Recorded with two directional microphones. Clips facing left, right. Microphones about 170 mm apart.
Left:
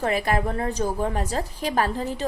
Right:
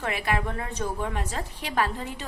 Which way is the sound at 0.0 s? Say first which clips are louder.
Left 5 dB; 40° left (ahead or behind).